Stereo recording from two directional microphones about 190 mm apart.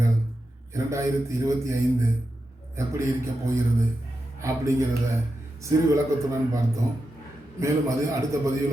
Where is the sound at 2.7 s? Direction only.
15° right (ahead or behind).